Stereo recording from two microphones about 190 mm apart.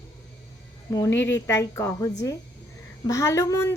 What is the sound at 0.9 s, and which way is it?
Speech, 15° left (ahead or behind).